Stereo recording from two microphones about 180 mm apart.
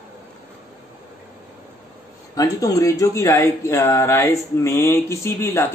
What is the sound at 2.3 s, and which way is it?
Speech, 20° left (ahead or behind).